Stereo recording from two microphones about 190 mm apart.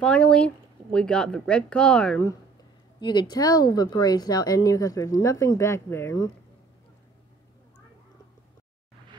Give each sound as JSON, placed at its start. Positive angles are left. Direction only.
{"t": 0.0, "sound": "speech", "side_deg": 5}
{"t": 3.0, "sound": "speech", "side_deg": 25}